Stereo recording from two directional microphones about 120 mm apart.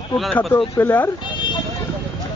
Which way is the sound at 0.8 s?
20° left (ahead or behind).